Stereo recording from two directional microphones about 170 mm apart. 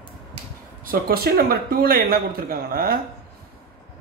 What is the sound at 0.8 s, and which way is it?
A man's voice, 65° right (ahead or behind).